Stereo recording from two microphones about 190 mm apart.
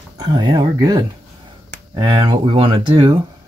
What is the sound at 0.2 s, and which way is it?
Speech, 20° right (ahead or behind).